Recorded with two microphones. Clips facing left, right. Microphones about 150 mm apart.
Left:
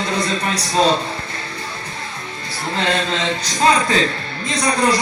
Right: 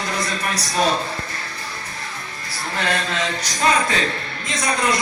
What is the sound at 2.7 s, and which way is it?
A man's voice, 25° left (ahead or behind).